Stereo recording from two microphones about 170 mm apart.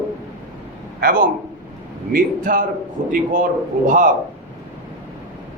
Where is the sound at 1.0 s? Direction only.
55° right (ahead or behind).